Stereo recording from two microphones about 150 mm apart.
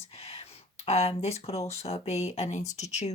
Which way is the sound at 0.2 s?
45° left (ahead or behind).